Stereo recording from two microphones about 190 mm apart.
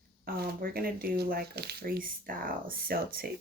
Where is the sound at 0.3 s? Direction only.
55° right (ahead or behind).